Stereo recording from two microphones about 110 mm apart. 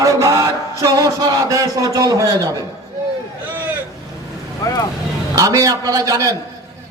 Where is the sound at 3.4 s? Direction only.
15° right (ahead or behind).